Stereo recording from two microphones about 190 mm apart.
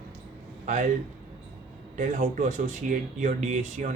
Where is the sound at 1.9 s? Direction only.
40° right (ahead or behind).